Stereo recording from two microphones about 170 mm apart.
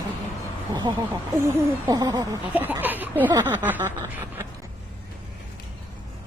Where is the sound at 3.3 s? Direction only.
20° right (ahead or behind).